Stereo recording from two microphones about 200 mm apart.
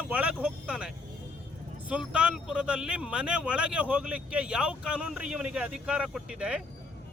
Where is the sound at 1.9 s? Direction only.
5° right (ahead or behind).